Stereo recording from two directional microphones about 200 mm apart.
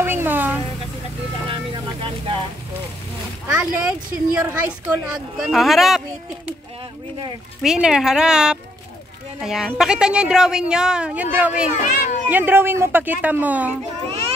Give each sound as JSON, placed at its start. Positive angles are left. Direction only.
{"t": 0.0, "sound": "a sound", "side_deg": -10}
{"t": 1.5, "sound": "vehicle", "side_deg": -25}
{"t": 3.4, "sound": "a woman's voice", "side_deg": -15}
{"t": 7.6, "sound": "a woman's voice", "side_deg": -5}
{"t": 11.7, "sound": "speech", "side_deg": 35}
{"t": 12.3, "sound": "speech", "side_deg": -10}